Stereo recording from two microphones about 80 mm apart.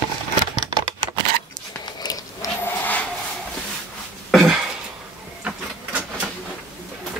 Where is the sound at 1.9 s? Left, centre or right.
Left.